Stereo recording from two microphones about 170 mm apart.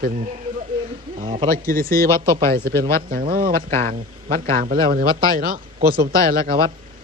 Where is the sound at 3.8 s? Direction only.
55° right (ahead or behind).